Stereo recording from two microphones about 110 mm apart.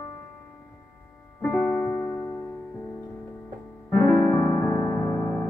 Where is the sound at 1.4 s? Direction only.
15° left (ahead or behind).